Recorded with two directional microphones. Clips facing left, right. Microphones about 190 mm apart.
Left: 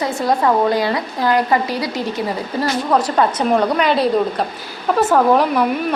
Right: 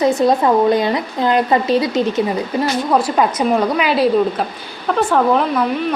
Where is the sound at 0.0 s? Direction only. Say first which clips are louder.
Right 4 dB; 20° right (ahead or behind).